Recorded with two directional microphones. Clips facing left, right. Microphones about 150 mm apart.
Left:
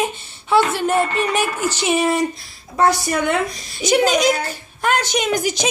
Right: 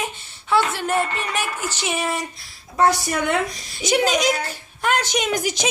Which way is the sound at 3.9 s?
40° left (ahead or behind).